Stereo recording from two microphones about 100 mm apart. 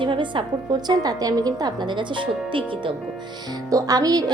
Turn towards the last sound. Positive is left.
turn(degrees=-40)  # may be behind; listen again after turning